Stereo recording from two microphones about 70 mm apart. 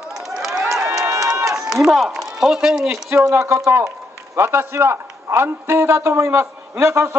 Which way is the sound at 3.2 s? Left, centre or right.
Right.